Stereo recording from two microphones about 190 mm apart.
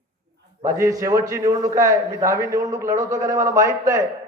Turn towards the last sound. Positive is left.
turn(degrees=-15)  # may be behind; listen again after turning